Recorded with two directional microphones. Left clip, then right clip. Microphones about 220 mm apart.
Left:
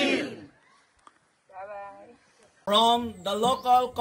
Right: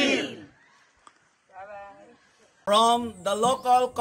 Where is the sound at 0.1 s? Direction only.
Centre (ahead or behind).